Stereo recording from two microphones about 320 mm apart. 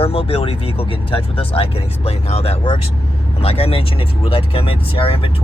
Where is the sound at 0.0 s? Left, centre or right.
Centre.